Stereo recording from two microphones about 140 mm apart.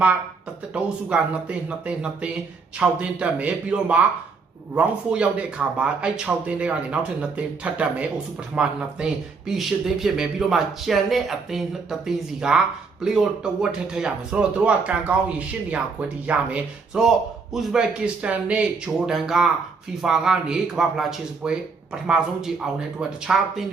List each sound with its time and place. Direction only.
0.7 s speech: 10° right (ahead or behind)